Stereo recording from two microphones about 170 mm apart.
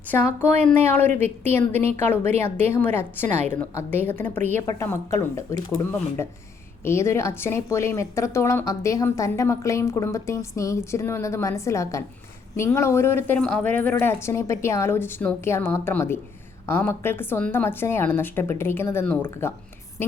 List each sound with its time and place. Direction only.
0.7 s speech: 10° left (ahead or behind)
3.2 s a woman's voice: 40° right (ahead or behind)
3.8 s a woman's voice: 10° left (ahead or behind)